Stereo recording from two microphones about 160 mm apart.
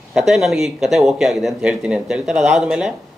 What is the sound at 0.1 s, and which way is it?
Speech, 5° right (ahead or behind).